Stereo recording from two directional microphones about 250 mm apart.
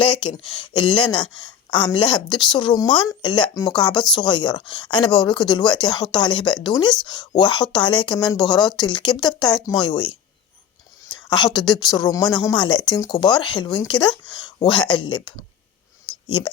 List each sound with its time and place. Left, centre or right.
0.2 s speech: centre
0.6 s speech: centre
1.5 s a sound: centre
2.0 s a woman's voice: centre